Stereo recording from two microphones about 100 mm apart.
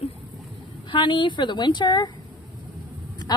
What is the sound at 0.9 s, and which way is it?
A woman's voice, 55° left (ahead or behind).